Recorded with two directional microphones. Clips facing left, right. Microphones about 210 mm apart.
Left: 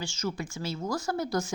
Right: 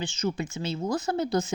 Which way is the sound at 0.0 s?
20° right (ahead or behind).